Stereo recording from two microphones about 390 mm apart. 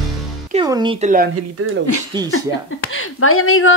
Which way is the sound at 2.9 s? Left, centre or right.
Left.